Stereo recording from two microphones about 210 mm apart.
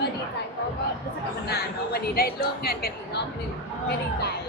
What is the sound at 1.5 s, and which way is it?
A woman's voice, 50° left (ahead or behind).